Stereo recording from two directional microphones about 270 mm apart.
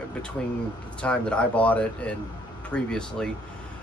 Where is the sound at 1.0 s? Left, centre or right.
Centre.